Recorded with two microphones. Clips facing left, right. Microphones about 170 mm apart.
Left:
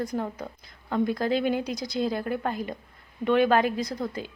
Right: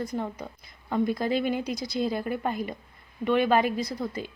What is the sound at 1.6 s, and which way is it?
Speech, 40° left (ahead or behind).